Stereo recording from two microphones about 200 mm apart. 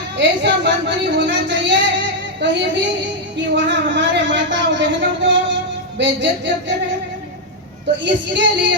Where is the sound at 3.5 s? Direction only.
60° right (ahead or behind).